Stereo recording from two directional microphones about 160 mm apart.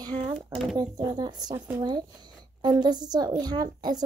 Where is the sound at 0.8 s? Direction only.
25° right (ahead or behind).